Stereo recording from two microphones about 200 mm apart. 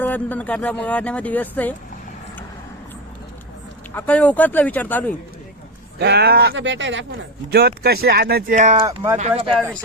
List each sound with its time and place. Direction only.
0.0 s speech: 10° left (ahead or behind)
3.9 s speech: 10° left (ahead or behind)
6.0 s speech: 55° right (ahead or behind); by 9.5 s 35° right (ahead or behind)
9.5 s speech: 5° left (ahead or behind)